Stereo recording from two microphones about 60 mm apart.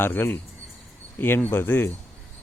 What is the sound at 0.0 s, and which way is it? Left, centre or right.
Speech, left.